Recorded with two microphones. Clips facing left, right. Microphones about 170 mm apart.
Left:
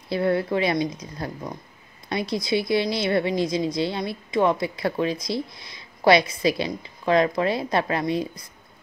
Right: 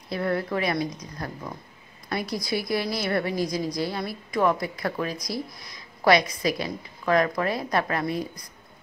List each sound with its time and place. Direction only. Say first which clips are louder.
0.1 s a woman's voice: left 4 dB; 25° left (ahead or behind)